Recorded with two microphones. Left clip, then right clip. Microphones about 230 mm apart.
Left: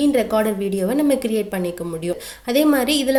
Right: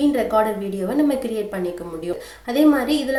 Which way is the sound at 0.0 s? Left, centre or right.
Left.